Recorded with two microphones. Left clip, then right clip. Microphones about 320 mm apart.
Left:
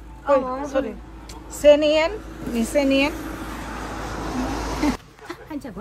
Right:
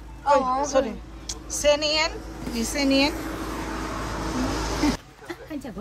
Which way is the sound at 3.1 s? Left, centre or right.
Left.